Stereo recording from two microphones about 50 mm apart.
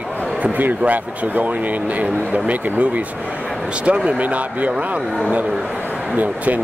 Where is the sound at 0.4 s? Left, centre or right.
Right.